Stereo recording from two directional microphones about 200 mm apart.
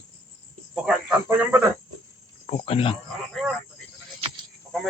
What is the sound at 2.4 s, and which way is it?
Speech, 30° left (ahead or behind).